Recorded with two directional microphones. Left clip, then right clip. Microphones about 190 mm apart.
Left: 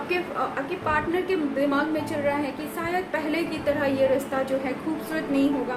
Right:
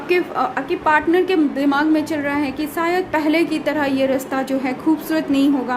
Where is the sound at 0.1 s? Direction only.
60° right (ahead or behind).